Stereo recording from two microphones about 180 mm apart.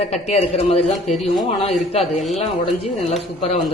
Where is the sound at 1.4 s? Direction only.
30° left (ahead or behind).